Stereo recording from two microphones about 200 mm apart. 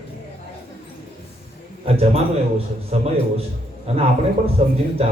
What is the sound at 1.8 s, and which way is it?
A man's voice, 30° right (ahead or behind).